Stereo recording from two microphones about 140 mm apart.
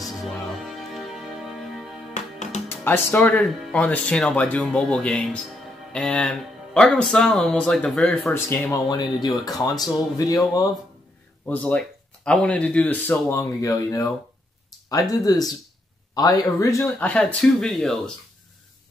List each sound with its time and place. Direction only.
0.0 s music: centre (ahead or behind)
2.1 s music: 55° left (ahead or behind)
2.7 s speech: 15° left (ahead or behind)
8.3 s speech: 15° left (ahead or behind)
8.8 s speech: 30° left (ahead or behind)
11.4 s speech: 10° left (ahead or behind)
17.0 s speech: 10° left (ahead or behind)